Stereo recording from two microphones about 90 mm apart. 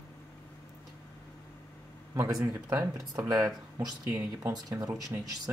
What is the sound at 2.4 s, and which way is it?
Speech, 40° right (ahead or behind).